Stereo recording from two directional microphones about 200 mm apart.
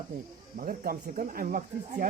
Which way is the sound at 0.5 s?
45° right (ahead or behind).